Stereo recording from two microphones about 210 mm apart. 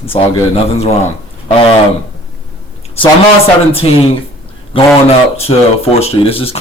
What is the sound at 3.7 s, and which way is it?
Speech, 25° left (ahead or behind).